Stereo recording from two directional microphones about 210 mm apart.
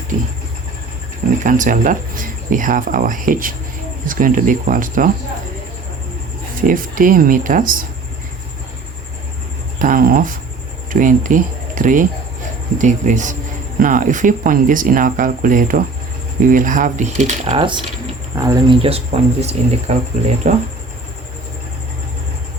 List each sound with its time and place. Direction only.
1.5 s speech: 40° right (ahead or behind)
6.6 s speech: 40° right (ahead or behind)
9.7 s speech: 40° right (ahead or behind)